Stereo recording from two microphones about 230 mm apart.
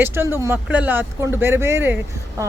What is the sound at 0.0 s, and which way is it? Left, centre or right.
Speech, centre.